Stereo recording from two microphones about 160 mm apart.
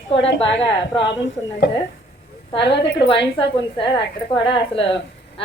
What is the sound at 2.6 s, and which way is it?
Speech, 90° left.